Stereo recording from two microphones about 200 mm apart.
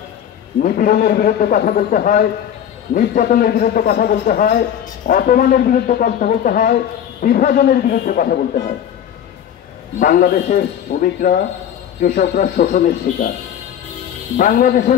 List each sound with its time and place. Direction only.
0.6 s a man's voice: 45° left (ahead or behind)
9.9 s a man's voice: 45° left (ahead or behind)
14.3 s a man's voice: 45° left (ahead or behind)